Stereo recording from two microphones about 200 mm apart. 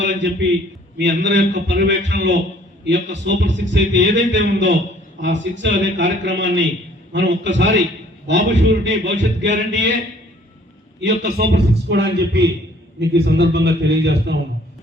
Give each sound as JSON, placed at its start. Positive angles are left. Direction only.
{"t": 0.0, "sound": "a man's voice", "side_deg": -65}
{"t": 11.0, "sound": "a man's voice", "side_deg": -55}